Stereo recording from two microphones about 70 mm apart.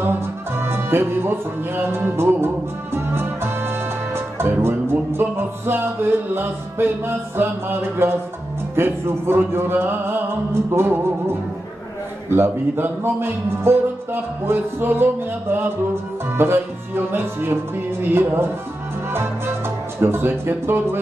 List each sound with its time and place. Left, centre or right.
0.0 s music: right
12.3 s music: right